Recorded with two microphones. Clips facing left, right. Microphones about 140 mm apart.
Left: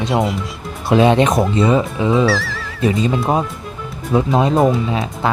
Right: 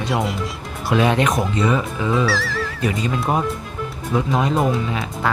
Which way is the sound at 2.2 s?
Centre (ahead or behind).